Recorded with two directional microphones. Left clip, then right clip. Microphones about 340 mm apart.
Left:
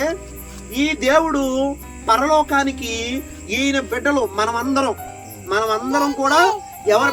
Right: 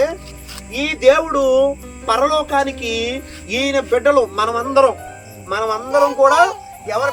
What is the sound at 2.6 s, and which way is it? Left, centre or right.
A man's voice, centre.